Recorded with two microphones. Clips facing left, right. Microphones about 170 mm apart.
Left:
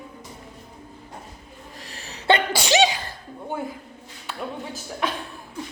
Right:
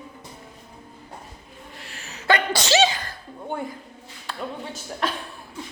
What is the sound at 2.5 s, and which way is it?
Sneeze, 15° left (ahead or behind).